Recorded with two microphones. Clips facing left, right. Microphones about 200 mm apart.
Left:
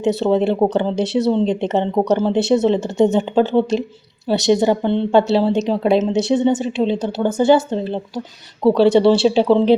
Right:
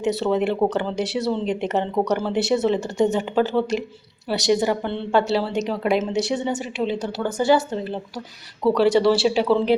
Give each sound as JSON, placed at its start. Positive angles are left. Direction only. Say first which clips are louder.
{"t": 0.2, "sound": "speech", "louder": "left 4 dB", "side_deg": 30}